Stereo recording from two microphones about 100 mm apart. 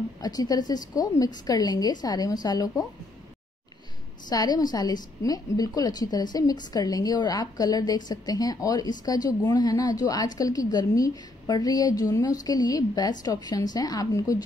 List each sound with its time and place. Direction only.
0.2 s a woman's voice: 40° left (ahead or behind)
4.3 s a woman's voice: 40° left (ahead or behind)